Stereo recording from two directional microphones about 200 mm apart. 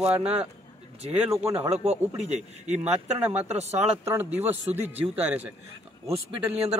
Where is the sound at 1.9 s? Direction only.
35° right (ahead or behind).